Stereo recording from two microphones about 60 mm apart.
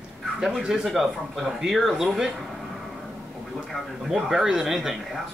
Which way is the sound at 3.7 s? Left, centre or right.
Centre.